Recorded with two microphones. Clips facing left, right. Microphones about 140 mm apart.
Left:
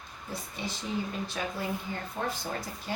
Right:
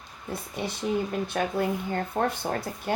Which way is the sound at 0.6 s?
60° right (ahead or behind).